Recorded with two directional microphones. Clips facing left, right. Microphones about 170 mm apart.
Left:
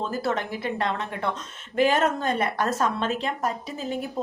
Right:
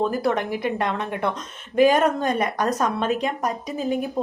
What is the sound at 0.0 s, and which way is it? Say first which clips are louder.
A woman's voice: right 5 dB; 15° right (ahead or behind).